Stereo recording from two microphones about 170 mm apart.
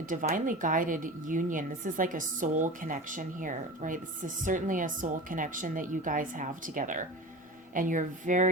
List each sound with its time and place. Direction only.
0.1 s a woman's voice: 50° right (ahead or behind)